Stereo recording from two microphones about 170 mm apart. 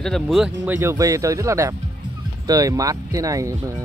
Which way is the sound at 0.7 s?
15° right (ahead or behind).